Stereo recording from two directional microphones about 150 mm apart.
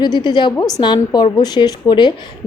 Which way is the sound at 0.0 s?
30° left (ahead or behind).